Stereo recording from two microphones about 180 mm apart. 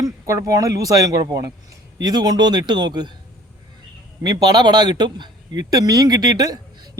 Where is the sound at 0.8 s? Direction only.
20° right (ahead or behind).